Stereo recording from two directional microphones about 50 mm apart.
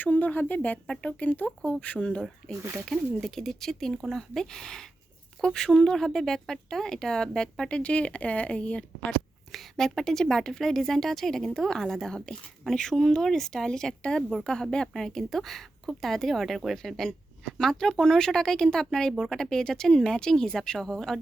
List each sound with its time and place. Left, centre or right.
0.0 s speech: left; by 7.8 s centre
7.8 s speech: left
9.5 s speech: centre